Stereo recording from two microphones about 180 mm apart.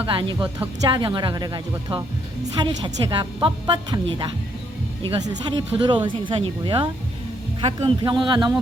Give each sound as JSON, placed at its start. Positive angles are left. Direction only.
{"t": 0.0, "sound": "speech", "side_deg": -25}